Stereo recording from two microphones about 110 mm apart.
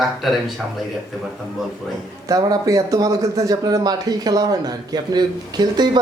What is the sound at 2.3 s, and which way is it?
Speech, 35° right (ahead or behind).